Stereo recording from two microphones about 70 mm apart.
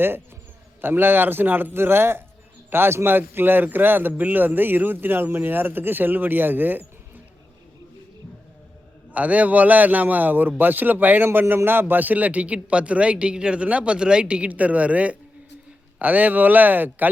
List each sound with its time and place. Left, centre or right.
0.8 s a man's voice: right
9.1 s a man's voice: right